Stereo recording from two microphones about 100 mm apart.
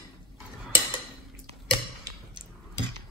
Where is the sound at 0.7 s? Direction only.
55° left (ahead or behind).